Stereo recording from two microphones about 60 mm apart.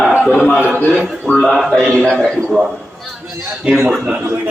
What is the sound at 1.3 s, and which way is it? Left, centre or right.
Speech, centre.